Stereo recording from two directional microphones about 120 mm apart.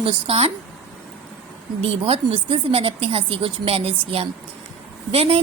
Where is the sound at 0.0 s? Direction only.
55° right (ahead or behind).